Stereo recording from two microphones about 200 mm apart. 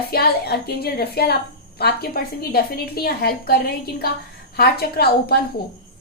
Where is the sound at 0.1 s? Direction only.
50° left (ahead or behind).